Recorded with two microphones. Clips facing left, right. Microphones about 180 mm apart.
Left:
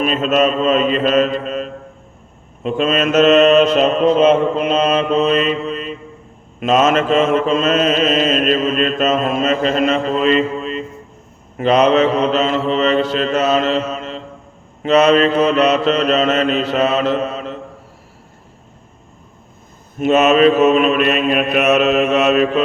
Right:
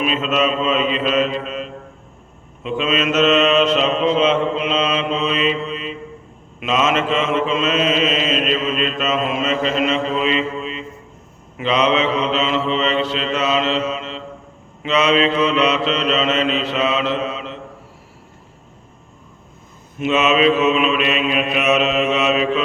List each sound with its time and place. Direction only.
0.0 s mantra: 45° left (ahead or behind)
20.0 s mantra: 45° left (ahead or behind)